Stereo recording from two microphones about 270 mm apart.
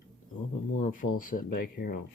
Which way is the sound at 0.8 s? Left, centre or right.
Left.